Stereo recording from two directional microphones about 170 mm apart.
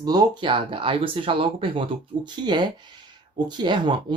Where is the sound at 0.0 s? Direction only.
25° right (ahead or behind).